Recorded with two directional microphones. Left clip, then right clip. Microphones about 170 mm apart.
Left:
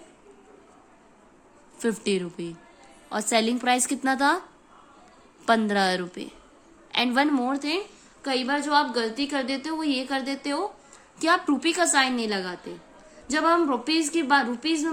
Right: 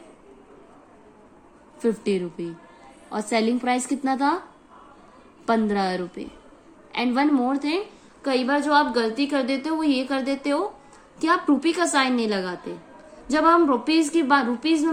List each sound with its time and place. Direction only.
1.8 s a woman's voice: 30° left (ahead or behind)
5.5 s a woman's voice: 35° left (ahead or behind); by 10.7 s 10° left (ahead or behind)
11.2 s a woman's voice: 25° left (ahead or behind)